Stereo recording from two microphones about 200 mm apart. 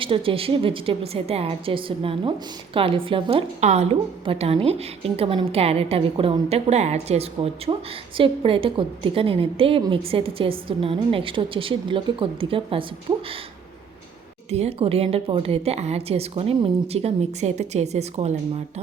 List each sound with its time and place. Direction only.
0.0 s a woman's voice: 25° right (ahead or behind)
14.5 s a woman's voice: 30° right (ahead or behind)